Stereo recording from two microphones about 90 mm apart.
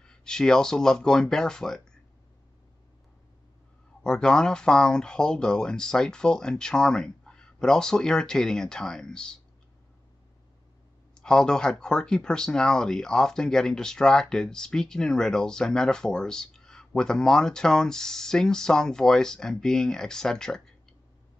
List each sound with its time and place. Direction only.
0.0 s speech: 5° left (ahead or behind)
4.0 s speech: 10° left (ahead or behind)
11.1 s speech: 10° left (ahead or behind)